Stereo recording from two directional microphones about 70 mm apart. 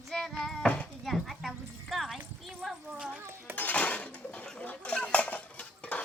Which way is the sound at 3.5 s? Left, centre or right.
Left.